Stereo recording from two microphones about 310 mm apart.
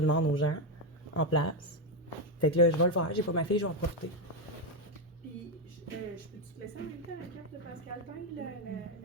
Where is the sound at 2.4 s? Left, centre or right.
Left.